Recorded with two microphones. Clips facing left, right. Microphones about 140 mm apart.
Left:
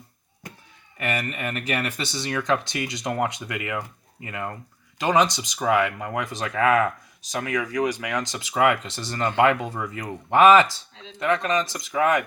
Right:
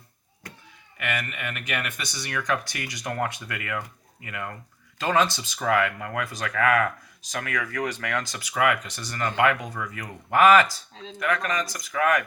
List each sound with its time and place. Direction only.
0.9 s speech: 35° left (ahead or behind)
4.9 s speech: 15° left (ahead or behind)